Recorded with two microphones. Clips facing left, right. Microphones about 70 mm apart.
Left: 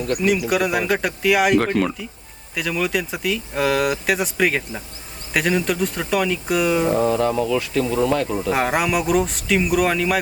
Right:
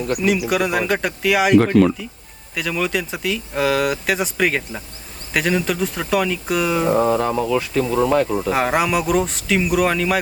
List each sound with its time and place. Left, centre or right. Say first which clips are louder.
0.1 s speech: even; centre
6.9 s speech: right 1 dB; right
8.5 s speech: right 1 dB; centre